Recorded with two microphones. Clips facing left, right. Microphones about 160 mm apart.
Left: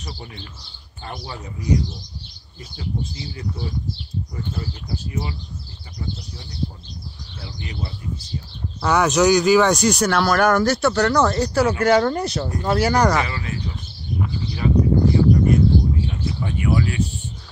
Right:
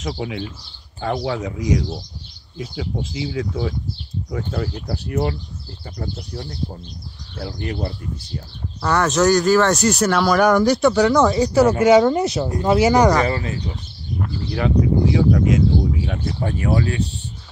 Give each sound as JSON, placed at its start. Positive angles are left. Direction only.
{"t": 0.0, "sound": "speech", "side_deg": -90}
{"t": 8.8, "sound": "speech", "side_deg": 0}
{"t": 10.3, "sound": "speech", "side_deg": 5}
{"t": 13.2, "sound": "speech", "side_deg": -35}
{"t": 14.5, "sound": "speech", "side_deg": -80}
{"t": 16.3, "sound": "speech", "side_deg": -50}
{"t": 16.5, "sound": "speech", "side_deg": -35}